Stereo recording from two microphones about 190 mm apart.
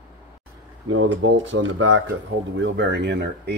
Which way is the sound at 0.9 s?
80° right.